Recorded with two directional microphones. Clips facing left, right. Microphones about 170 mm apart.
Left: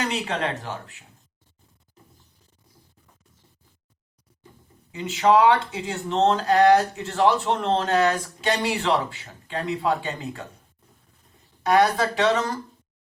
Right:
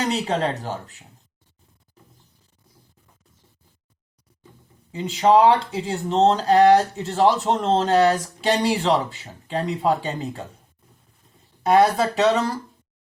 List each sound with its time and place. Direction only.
0.0 s speech: 35° right (ahead or behind)
4.9 s speech: 35° right (ahead or behind)
11.6 s speech: 30° right (ahead or behind)